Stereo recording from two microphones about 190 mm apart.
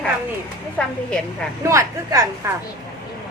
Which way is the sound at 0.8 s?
5° left (ahead or behind).